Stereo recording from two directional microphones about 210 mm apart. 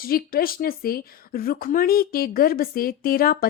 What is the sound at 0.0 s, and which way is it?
Speech, 45° left (ahead or behind).